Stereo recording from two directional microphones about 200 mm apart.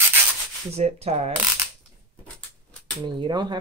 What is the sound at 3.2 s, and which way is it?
Speech, 20° right (ahead or behind).